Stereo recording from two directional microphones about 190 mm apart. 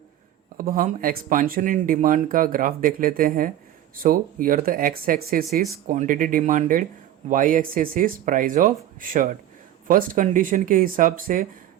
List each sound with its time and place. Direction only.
0.5 s speech: 45° right (ahead or behind)